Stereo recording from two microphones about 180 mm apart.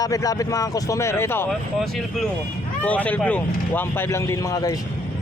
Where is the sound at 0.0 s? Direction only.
20° left (ahead or behind).